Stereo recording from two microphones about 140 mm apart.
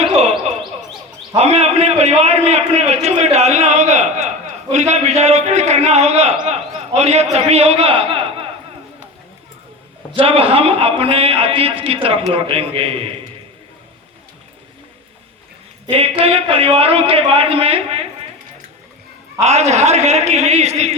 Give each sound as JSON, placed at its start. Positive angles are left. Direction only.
{"t": 0.0, "sound": "a sound", "side_deg": -50}
{"t": 1.4, "sound": "a man's voice", "side_deg": -50}
{"t": 10.2, "sound": "a man's voice", "side_deg": -40}
{"t": 15.9, "sound": "a man's voice", "side_deg": -40}
{"t": 19.4, "sound": "a man's voice", "side_deg": -50}